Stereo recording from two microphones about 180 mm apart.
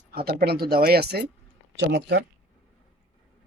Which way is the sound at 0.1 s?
55° right (ahead or behind).